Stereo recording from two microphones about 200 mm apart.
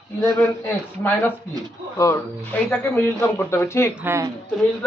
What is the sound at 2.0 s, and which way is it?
Speech, 10° left (ahead or behind).